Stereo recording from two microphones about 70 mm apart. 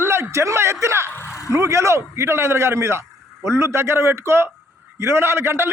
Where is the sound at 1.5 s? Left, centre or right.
Right.